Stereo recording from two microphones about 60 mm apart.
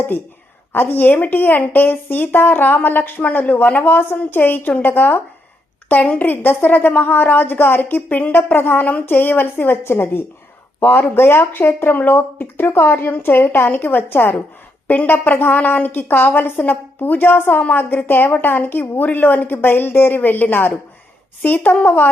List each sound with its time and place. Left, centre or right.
0.7 s a woman's voice: left